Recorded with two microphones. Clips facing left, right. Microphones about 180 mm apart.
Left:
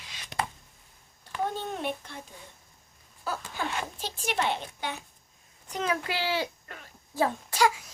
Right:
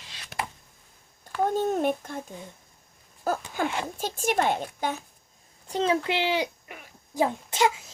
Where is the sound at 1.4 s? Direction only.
45° right (ahead or behind).